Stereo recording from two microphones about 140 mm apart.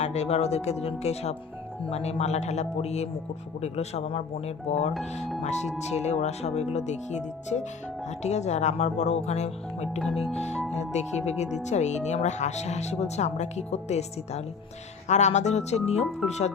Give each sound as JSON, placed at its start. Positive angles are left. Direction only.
{"t": 0.0, "sound": "speech", "side_deg": 50}
{"t": 10.5, "sound": "speech", "side_deg": 5}
{"t": 10.8, "sound": "speech", "side_deg": 55}